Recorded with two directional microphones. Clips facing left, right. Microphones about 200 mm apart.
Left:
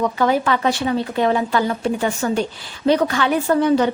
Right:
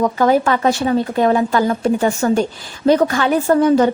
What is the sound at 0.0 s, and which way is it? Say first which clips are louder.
A woman's voice: right 4 dB; 45° right (ahead or behind).